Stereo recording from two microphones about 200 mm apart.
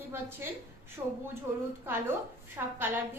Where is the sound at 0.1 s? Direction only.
10° right (ahead or behind).